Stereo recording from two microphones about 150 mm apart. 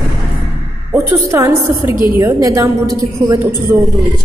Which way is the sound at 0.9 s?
20° right (ahead or behind).